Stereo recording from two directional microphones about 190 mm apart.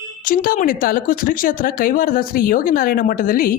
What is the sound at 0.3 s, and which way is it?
A woman's voice, 50° left (ahead or behind).